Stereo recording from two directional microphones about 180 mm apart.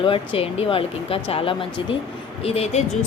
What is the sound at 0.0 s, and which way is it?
Speech, 30° left (ahead or behind).